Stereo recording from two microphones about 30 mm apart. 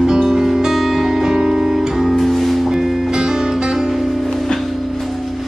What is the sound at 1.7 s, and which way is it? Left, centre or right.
Music, centre.